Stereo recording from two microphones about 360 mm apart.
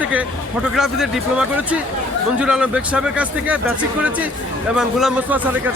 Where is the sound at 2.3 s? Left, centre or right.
Centre.